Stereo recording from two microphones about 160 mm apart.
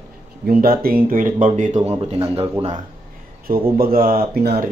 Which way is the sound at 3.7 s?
65° right (ahead or behind).